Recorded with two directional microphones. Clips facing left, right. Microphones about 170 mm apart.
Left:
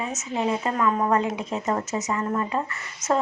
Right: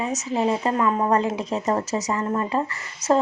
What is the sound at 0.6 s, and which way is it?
Speech, 30° right (ahead or behind).